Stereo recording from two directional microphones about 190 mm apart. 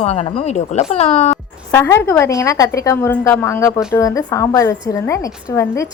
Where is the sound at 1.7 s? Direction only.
15° left (ahead or behind).